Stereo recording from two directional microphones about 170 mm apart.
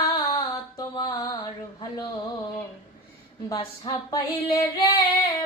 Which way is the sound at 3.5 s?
20° left (ahead or behind).